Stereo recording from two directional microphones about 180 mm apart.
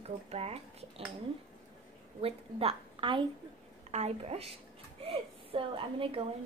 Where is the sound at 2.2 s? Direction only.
30° right (ahead or behind).